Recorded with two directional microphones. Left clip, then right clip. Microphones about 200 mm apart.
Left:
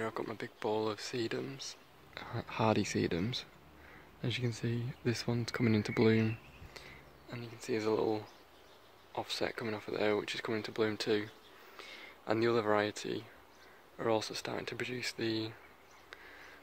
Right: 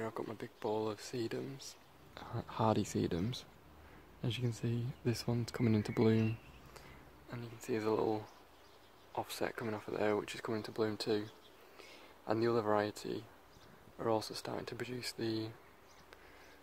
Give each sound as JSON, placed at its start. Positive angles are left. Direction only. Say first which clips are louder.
{"t": 0.0, "sound": "speech", "louder": "left 3 dB", "side_deg": 5}